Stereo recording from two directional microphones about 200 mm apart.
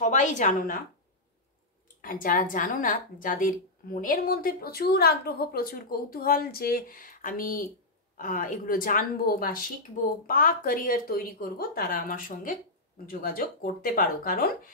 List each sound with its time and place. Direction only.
0.0 s a woman's voice: 40° left (ahead or behind)
2.0 s a woman's voice: 45° left (ahead or behind)